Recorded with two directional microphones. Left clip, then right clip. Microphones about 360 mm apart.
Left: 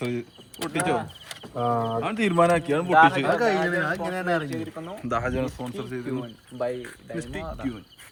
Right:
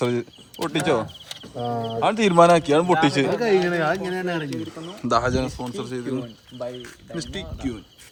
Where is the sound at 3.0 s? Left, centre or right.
Right.